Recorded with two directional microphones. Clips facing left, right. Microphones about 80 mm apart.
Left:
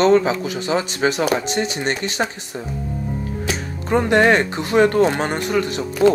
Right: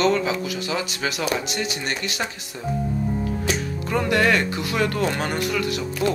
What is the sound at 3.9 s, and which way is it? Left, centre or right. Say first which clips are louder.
Speech: left 5 dB; left.